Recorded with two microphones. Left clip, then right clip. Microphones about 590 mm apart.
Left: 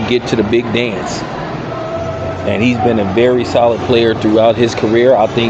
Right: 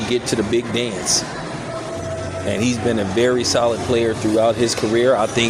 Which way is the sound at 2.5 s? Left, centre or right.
Right.